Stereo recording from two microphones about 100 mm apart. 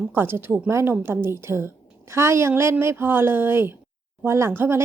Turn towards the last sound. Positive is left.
turn(degrees=-25)  # may be behind; listen again after turning